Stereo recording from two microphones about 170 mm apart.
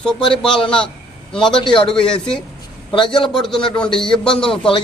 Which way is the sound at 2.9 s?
30° left (ahead or behind).